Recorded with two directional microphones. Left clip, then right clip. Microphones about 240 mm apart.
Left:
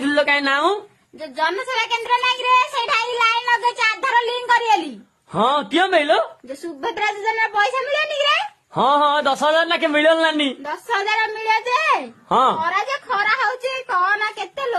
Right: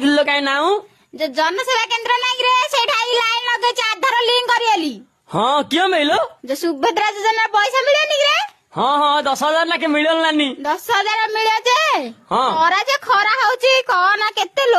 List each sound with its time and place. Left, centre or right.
0.0 s speech: right
1.2 s child singing: right
5.3 s a man's voice: right
9.0 s a man's voice: centre
10.7 s a child's voice: right
12.6 s a sound: right